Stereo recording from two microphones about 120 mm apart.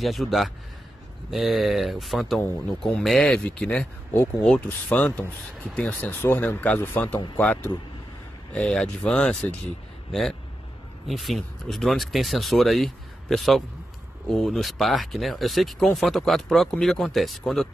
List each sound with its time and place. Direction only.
0.0 s speech: centre (ahead or behind)
11.1 s speech: centre (ahead or behind)